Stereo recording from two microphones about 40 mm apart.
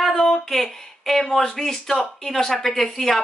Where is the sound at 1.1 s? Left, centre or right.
Centre.